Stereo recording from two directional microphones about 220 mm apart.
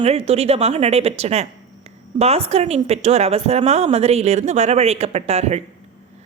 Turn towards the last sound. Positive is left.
turn(degrees=-30)  # may be behind; listen again after turning